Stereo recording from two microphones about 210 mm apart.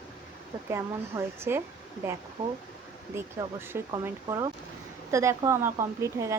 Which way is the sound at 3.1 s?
10° right (ahead or behind).